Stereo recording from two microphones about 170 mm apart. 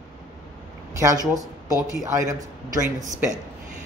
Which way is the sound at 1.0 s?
20° right (ahead or behind).